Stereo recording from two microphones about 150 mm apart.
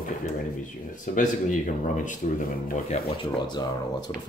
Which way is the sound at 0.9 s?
60° left (ahead or behind).